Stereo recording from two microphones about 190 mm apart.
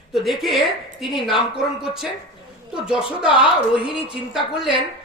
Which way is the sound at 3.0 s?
25° left (ahead or behind).